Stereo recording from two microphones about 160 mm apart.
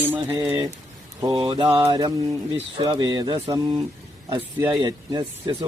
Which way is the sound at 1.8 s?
25° right (ahead or behind).